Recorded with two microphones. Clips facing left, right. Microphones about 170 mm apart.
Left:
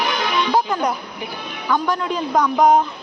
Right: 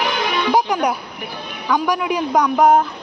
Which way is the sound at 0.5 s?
10° right (ahead or behind).